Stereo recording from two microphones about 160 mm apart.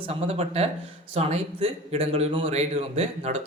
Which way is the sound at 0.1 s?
40° right (ahead or behind).